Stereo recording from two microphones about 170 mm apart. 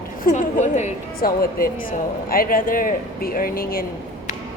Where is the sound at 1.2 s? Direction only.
60° left (ahead or behind).